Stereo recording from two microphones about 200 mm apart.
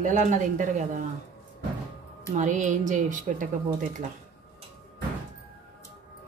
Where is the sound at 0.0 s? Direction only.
40° right (ahead or behind).